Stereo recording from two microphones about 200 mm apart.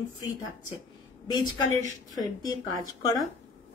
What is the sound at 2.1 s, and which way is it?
Speech, 20° left (ahead or behind).